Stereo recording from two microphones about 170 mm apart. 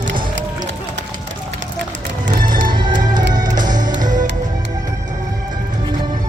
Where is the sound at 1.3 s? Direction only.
90° right.